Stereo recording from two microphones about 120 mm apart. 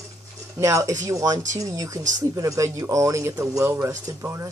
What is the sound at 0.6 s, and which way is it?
Speech, 25° right (ahead or behind).